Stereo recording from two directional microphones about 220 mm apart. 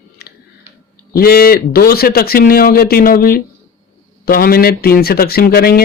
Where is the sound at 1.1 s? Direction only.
45° left (ahead or behind).